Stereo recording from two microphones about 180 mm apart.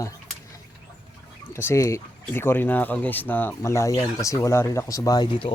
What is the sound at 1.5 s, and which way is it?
Speech, 15° left (ahead or behind).